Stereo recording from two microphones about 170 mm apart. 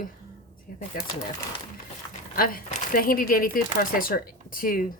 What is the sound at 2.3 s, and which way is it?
Speech, 60° left (ahead or behind).